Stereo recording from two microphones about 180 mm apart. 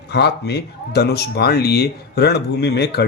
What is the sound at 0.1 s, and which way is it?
Speech, 65° left (ahead or behind).